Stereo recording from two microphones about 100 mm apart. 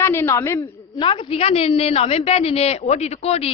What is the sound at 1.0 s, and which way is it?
A woman's voice, 55° left (ahead or behind).